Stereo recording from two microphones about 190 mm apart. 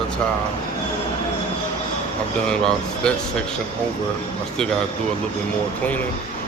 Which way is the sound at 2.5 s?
5° left (ahead or behind).